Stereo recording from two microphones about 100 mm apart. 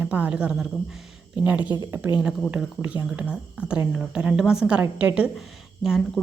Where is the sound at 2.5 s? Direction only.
15° right (ahead or behind).